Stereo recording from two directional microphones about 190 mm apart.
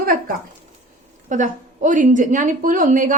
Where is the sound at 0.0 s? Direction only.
50° right (ahead or behind).